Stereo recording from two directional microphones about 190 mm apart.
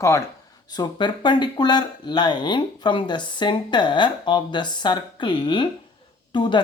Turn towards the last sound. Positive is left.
turn(degrees=25)  # may be behind; listen again after turning